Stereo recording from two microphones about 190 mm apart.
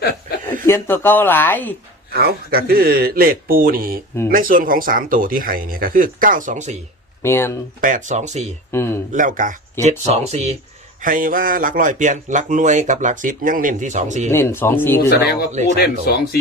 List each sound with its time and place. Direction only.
0.6 s speech: 10° left (ahead or behind)
2.1 s a man's voice: 55° right (ahead or behind)
7.2 s speech: 15° left (ahead or behind)
7.8 s speech: 45° right (ahead or behind)
8.7 s speech: 15° left (ahead or behind)
9.1 s a man's voice: 45° right (ahead or behind)
10.1 s speech: 35° right (ahead or behind)
11.0 s a man's voice: 45° right (ahead or behind)
14.3 s speech: 15° left (ahead or behind)
15.1 s speech: 55° left (ahead or behind)